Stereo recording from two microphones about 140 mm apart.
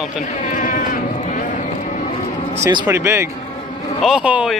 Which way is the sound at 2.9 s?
20° right (ahead or behind).